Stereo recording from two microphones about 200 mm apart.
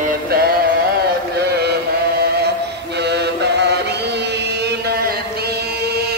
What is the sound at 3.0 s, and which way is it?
Chant, 55° right (ahead or behind).